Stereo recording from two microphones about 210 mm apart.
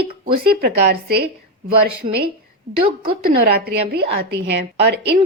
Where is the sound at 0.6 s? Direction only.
50° right (ahead or behind).